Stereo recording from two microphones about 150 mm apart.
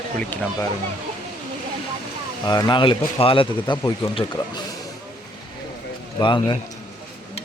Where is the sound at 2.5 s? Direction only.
30° left (ahead or behind).